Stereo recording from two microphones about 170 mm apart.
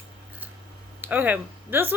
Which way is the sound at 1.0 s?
10° right (ahead or behind).